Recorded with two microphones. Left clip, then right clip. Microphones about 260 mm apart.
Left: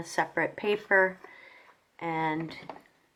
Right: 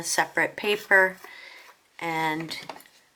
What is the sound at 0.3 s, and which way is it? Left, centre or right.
Speech, centre.